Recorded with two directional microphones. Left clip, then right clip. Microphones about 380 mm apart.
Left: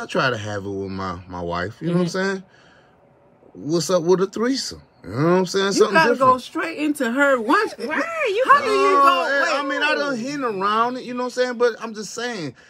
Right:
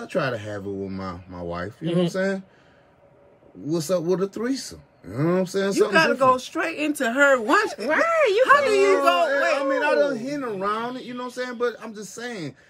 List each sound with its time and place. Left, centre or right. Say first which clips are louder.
0.0 s speech: left 4 dB; centre
3.7 s speech: left 5 dB; centre
8.1 s a woman's voice: right 2 dB; right
8.5 s speech: left 1 dB; centre